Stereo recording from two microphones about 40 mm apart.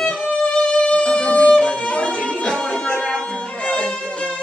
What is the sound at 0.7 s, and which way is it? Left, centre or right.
Violin, left.